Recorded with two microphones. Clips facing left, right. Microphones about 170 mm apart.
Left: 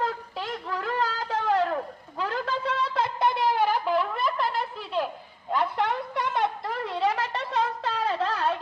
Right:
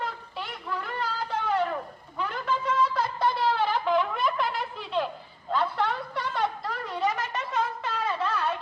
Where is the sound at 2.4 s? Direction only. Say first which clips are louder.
Right 6 dB; 35° left (ahead or behind); by 5.0 s 5° left (ahead or behind).